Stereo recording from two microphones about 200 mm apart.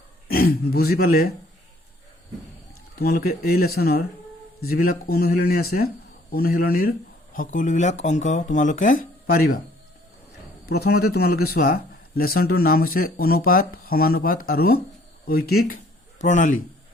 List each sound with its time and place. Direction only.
0.3 s speech: 50° left (ahead or behind)
3.0 s speech: 50° left (ahead or behind)
10.7 s speech: 50° left (ahead or behind)